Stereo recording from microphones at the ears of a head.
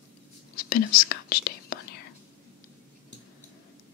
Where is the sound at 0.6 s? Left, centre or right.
Left.